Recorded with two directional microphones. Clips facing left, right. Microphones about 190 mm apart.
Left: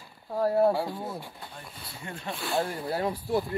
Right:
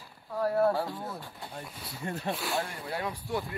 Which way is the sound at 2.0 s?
40° right (ahead or behind).